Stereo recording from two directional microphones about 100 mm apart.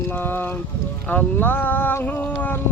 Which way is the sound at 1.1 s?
20° left (ahead or behind).